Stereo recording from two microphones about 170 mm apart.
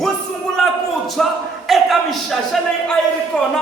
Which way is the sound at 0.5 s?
Centre (ahead or behind).